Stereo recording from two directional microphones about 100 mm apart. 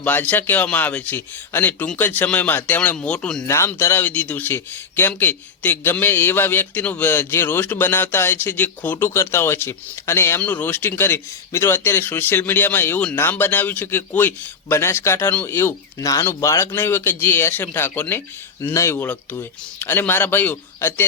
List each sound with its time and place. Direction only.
0.0 s speech: 15° left (ahead or behind)
3.4 s speech: 30° left (ahead or behind)
18.9 s speech: 15° left (ahead or behind)